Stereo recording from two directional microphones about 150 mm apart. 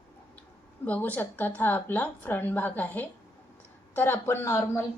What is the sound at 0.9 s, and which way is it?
A woman's voice, 10° left (ahead or behind).